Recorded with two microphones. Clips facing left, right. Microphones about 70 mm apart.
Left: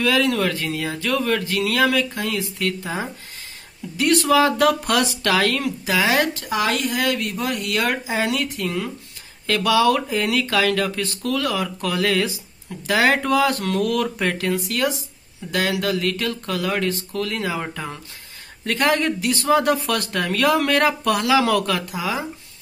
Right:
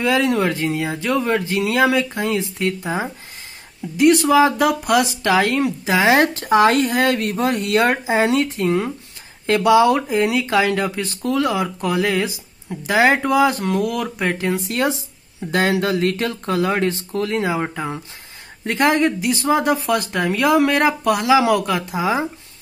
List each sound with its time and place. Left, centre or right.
0.0 s speech: right
3.9 s speech: centre
14.6 s speech: right
21.9 s speech: right